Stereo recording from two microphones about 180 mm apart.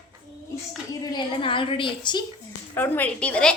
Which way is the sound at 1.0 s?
25° left (ahead or behind).